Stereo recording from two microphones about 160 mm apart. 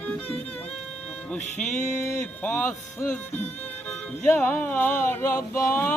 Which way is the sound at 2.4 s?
10° left (ahead or behind).